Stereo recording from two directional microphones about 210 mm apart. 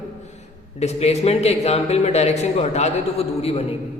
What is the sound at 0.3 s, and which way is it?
A man's voice, 30° left (ahead or behind).